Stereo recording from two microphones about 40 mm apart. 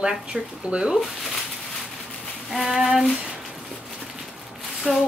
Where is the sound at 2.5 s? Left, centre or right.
Centre.